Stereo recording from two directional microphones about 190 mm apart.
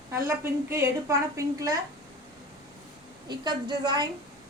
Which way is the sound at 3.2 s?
20° right (ahead or behind).